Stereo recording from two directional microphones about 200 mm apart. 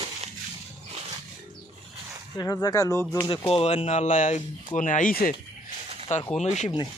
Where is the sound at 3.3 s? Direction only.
30° left (ahead or behind).